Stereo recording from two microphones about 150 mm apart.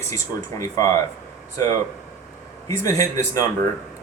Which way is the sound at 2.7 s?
20° left (ahead or behind).